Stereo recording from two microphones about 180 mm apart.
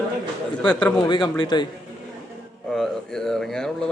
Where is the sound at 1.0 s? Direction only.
25° left (ahead or behind).